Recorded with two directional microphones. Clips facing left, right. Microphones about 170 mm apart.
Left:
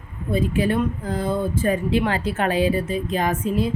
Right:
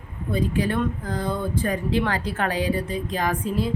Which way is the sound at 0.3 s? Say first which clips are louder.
Left 3 dB; 25° left (ahead or behind).